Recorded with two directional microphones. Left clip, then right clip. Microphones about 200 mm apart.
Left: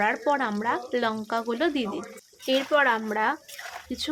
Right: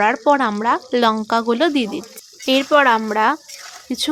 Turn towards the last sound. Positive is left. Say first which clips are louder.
# right 9 dB
turn(degrees=-35)  # may be behind; listen again after turning